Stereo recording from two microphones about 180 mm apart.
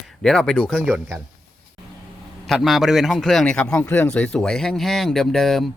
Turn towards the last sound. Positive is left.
turn(degrees=0)  # may be behind; listen again after turning